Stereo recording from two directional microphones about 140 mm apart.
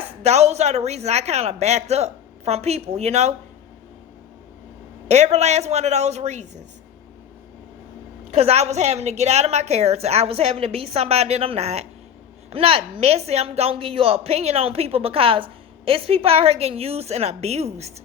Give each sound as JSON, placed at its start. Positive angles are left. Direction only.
{"t": 0.2, "sound": "speech", "side_deg": -50}
{"t": 5.0, "sound": "speech", "side_deg": -55}
{"t": 8.3, "sound": "speech", "side_deg": -50}